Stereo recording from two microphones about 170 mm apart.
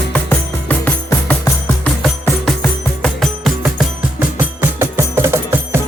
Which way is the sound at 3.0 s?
Centre (ahead or behind).